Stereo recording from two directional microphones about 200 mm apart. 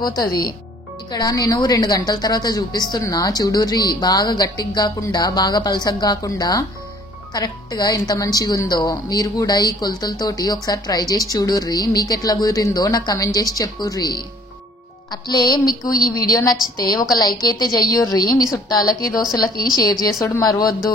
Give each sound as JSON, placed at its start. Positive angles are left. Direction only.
{"t": 0.0, "sound": "a woman's voice", "side_deg": 20}
{"t": 20.2, "sound": "a woman's voice", "side_deg": 10}
{"t": 20.4, "sound": "a woman's voice", "side_deg": 20}